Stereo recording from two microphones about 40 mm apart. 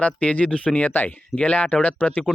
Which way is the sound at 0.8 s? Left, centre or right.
Left.